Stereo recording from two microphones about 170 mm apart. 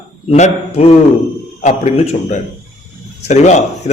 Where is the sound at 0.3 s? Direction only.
40° left (ahead or behind).